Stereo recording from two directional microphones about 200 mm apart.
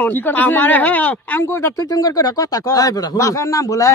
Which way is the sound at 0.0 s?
10° left (ahead or behind).